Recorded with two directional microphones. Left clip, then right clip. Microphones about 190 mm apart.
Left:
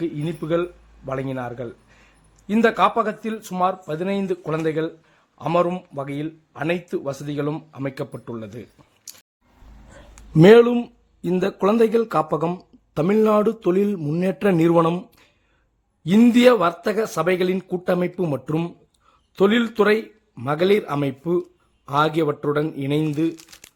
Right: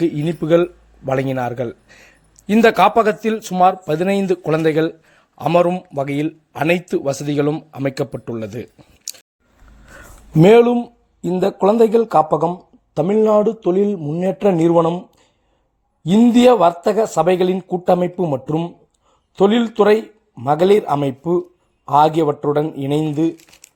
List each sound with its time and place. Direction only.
0.0 s a man's voice: 30° right (ahead or behind)
10.4 s speech: 5° right (ahead or behind)
10.8 s speech: 10° left (ahead or behind)
16.0 s speech: centre (ahead or behind)